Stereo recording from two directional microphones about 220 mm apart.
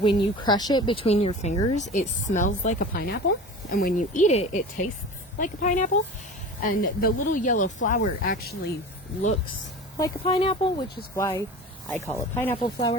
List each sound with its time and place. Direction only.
0.0 s speech: 20° left (ahead or behind); by 8.5 s 40° left (ahead or behind)
10.0 s speech: 25° left (ahead or behind)